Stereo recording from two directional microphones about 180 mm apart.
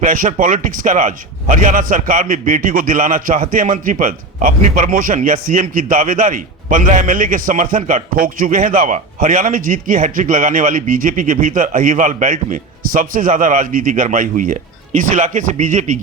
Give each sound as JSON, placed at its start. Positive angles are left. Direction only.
{"t": 0.0, "sound": "a man's voice", "side_deg": -45}